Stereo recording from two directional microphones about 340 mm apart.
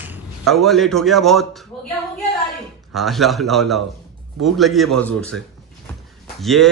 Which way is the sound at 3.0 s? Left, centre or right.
Centre.